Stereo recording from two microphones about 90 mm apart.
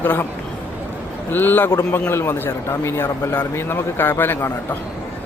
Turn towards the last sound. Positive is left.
turn(degrees=25)  # may be behind; listen again after turning